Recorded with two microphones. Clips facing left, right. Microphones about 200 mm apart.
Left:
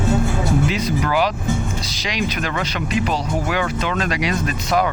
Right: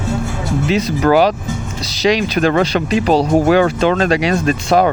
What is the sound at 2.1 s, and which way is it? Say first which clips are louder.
Speech: right 10 dB; 30° right (ahead or behind).